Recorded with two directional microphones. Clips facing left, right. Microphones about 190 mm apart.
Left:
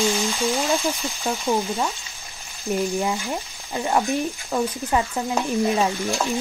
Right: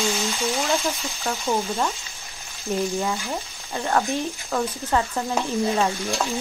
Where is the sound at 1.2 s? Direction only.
15° left (ahead or behind).